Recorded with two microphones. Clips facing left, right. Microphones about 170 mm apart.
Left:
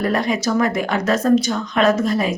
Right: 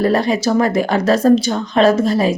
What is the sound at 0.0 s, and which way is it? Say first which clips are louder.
Speech: right 4 dB; 30° right (ahead or behind).